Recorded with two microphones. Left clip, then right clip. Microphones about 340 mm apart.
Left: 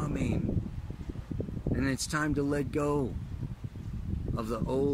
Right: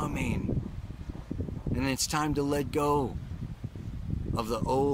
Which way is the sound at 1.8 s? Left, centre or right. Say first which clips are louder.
Right 2 dB; centre.